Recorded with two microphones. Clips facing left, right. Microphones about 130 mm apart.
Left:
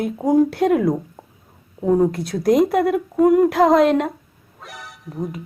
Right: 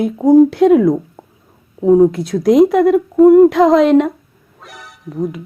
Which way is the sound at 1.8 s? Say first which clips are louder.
Right 7 dB; 5° right (ahead or behind).